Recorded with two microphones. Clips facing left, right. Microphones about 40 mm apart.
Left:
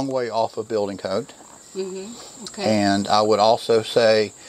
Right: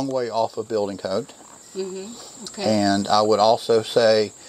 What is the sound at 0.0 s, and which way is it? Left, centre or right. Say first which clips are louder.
Speech: even; left.